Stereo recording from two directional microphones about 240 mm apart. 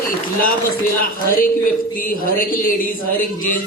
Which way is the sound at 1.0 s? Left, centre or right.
Left.